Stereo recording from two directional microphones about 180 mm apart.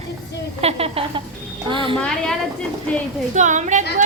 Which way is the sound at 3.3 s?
40° right (ahead or behind).